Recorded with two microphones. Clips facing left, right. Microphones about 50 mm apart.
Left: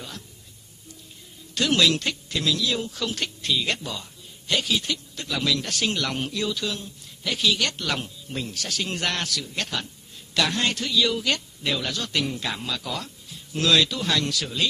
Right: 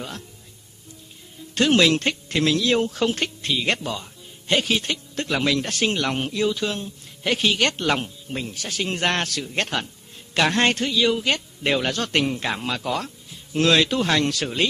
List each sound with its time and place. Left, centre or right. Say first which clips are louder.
1.5 s speech: right 4 dB; right
8.3 s speech: left 2 dB; right
10.9 s speech: right 2 dB; right
11.6 s speech: right 7 dB; right
12.3 s speech: right 4 dB; right